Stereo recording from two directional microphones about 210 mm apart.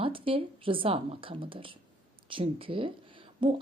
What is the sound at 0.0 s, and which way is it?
A woman's voice, 25° right (ahead or behind).